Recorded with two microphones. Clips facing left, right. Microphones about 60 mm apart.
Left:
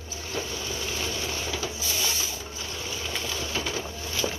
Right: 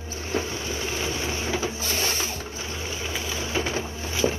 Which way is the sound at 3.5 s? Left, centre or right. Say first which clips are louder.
Right 4 dB; right.